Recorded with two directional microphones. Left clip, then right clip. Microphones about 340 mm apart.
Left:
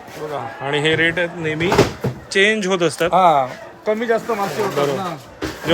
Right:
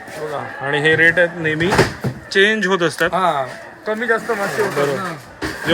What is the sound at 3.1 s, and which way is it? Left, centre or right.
Speech, centre.